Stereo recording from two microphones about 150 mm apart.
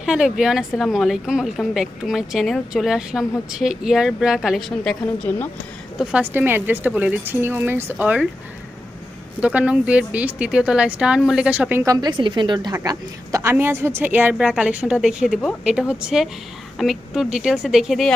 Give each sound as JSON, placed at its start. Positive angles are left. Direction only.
{"t": 0.0, "sound": "speech", "side_deg": 0}
{"t": 6.0, "sound": "a woman's voice", "side_deg": -5}
{"t": 9.4, "sound": "a woman's voice", "side_deg": -10}
{"t": 11.8, "sound": "a woman's voice", "side_deg": -25}